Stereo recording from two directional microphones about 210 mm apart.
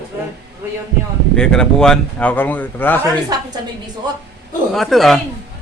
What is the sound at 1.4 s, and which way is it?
Speech, 5° left (ahead or behind).